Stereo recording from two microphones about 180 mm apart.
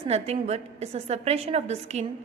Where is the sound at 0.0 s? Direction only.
35° right (ahead or behind).